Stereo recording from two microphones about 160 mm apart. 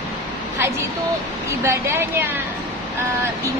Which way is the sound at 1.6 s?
15° right (ahead or behind).